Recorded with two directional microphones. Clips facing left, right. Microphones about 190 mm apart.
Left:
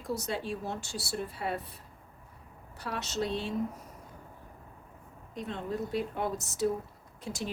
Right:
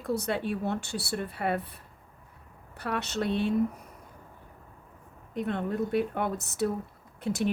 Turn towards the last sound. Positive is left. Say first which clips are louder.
# right 9 dB
turn(degrees=-60)  # may be behind; listen again after turning